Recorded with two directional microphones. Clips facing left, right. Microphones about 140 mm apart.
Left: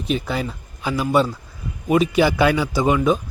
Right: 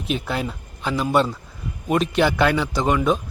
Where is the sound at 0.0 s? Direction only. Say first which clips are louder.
Left 2 dB; centre (ahead or behind).